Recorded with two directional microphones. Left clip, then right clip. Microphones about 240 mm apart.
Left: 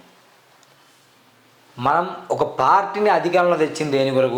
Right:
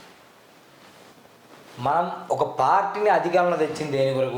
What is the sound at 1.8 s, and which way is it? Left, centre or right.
Speech, left.